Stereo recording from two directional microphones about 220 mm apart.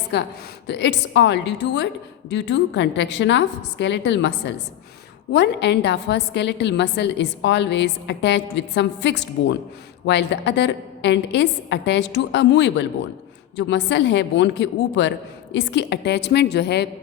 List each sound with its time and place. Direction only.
0.1 s a woman's voice: 50° left (ahead or behind)